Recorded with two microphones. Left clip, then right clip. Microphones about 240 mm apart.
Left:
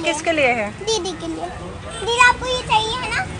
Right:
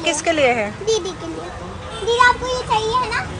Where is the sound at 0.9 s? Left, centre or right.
Left.